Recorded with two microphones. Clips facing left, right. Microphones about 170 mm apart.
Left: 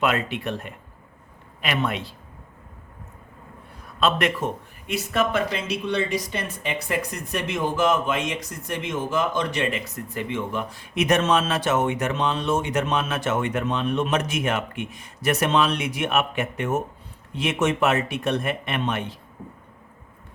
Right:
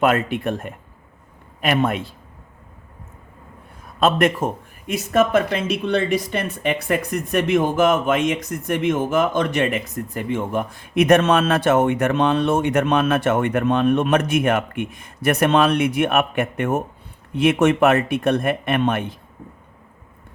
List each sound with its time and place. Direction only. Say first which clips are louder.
0.0 s speech: right 5 dB; 50° right (ahead or behind)
4.0 s a man's voice: right 5 dB; 45° right (ahead or behind)